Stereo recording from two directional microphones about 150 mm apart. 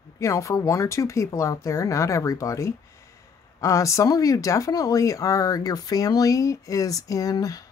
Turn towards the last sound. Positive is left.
turn(degrees=25)  # may be behind; listen again after turning